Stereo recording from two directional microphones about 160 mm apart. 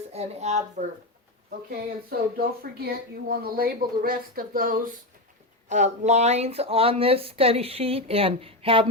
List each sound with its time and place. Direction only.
0.1 s a woman's voice: 45° right (ahead or behind)
2.0 s speech: 75° right (ahead or behind)
5.6 s speech: 45° right (ahead or behind)